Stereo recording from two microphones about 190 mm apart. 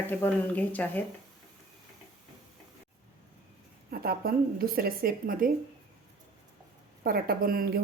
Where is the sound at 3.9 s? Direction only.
50° right (ahead or behind).